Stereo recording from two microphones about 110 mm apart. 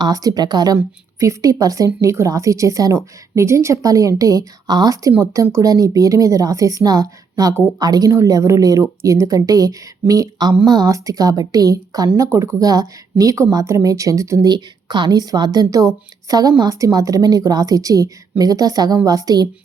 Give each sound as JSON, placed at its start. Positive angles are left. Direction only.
{"t": 0.0, "sound": "speech", "side_deg": -35}